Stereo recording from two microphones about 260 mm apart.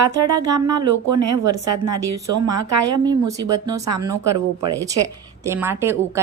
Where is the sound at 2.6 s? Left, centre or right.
Centre.